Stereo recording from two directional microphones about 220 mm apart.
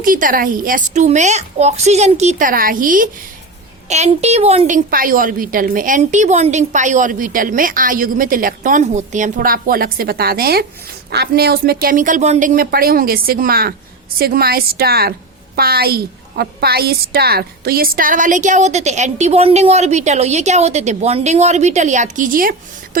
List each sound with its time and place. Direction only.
0.0 s a woman's voice: 40° right (ahead or behind)